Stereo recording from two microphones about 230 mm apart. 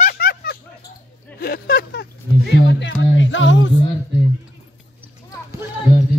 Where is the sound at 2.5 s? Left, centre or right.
Left.